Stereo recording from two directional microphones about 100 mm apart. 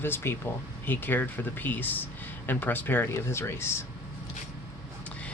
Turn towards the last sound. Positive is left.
turn(degrees=25)  # may be behind; listen again after turning